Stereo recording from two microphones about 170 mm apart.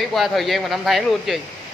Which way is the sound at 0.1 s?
Centre (ahead or behind).